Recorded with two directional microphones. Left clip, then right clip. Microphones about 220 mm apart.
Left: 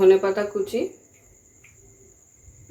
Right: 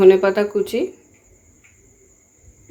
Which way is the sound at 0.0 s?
50° right (ahead or behind).